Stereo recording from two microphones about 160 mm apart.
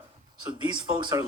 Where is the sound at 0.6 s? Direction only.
30° right (ahead or behind).